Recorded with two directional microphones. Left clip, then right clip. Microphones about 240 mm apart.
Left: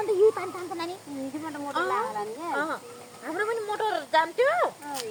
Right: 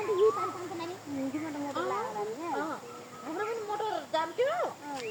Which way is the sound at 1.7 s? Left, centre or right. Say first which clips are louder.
Left 7 dB; left.